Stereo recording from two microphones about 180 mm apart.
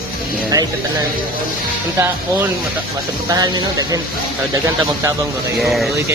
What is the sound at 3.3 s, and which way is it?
Speech, 20° right (ahead or behind).